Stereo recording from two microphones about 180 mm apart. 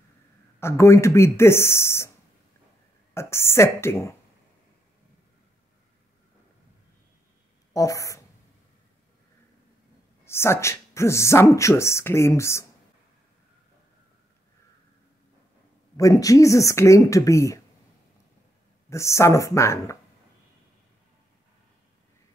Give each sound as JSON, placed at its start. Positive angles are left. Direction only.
{"t": 0.6, "sound": "speech", "side_deg": 15}
{"t": 3.2, "sound": "speech", "side_deg": 15}
{"t": 7.7, "sound": "speech", "side_deg": 15}
{"t": 10.2, "sound": "speech", "side_deg": 15}
{"t": 16.0, "sound": "speech", "side_deg": 20}
{"t": 18.9, "sound": "speech", "side_deg": 15}